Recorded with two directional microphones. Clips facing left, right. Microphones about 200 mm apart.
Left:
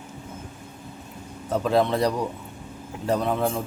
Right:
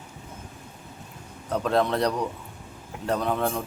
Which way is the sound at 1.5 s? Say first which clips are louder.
Left 2 dB; 5° left (ahead or behind).